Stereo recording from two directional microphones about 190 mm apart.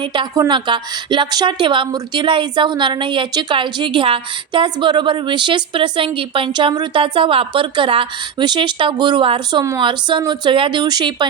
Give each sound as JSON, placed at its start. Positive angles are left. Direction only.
{"t": 0.0, "sound": "a woman's voice", "side_deg": -25}